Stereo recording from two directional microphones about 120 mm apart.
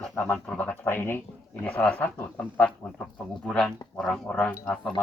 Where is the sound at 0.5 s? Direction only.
10° left (ahead or behind).